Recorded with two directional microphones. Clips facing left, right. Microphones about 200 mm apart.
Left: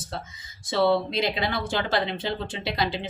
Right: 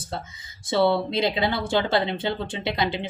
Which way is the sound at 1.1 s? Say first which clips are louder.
Right 3 dB; 25° right (ahead or behind).